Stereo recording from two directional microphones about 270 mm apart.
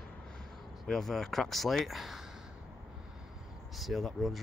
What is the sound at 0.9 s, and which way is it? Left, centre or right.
Speech, centre.